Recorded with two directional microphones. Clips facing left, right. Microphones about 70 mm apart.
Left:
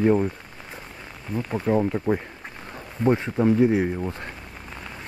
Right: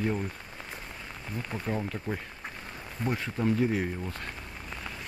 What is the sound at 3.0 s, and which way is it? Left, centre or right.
Speech, left.